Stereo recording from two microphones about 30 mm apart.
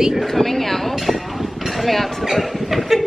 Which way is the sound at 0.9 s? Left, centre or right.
Centre.